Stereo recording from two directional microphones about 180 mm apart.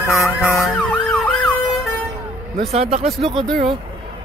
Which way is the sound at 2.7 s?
35° right (ahead or behind).